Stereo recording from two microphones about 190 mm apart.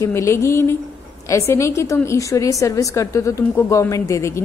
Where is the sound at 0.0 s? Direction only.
15° left (ahead or behind).